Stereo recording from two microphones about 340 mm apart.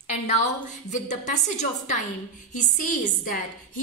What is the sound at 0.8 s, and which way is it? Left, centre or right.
A woman's voice, left.